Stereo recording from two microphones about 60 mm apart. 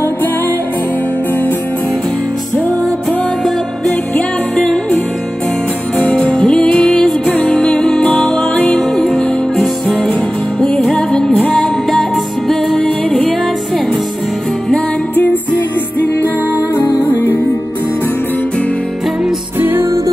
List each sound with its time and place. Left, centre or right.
3.1 s music: centre
5.9 s music: centre
12.8 s music: centre
16.7 s music: left
19.6 s music: right